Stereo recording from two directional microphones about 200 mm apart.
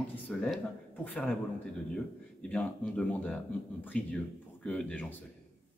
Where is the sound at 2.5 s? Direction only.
5° left (ahead or behind).